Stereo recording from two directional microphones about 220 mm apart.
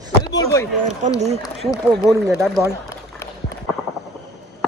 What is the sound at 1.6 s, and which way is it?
Speech, centre (ahead or behind).